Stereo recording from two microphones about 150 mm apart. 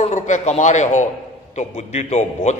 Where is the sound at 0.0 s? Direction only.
50° left (ahead or behind).